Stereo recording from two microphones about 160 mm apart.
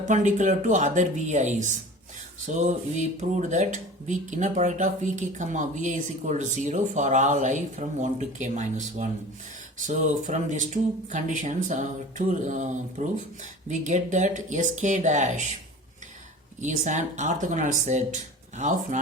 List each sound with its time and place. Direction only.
0.1 s speech: 50° right (ahead or behind)
16.6 s speech: 50° right (ahead or behind)